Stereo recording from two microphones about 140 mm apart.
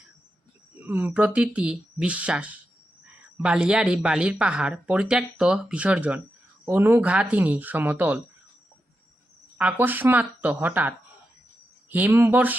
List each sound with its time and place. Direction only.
0.8 s speech: 15° right (ahead or behind)
9.6 s speech: 10° right (ahead or behind)